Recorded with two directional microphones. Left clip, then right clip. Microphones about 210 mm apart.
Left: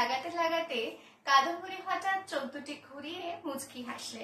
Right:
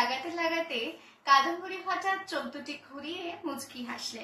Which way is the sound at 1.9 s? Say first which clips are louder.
Right 1 dB; 15° left (ahead or behind).